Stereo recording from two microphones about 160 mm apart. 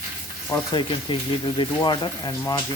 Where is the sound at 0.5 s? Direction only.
30° left (ahead or behind).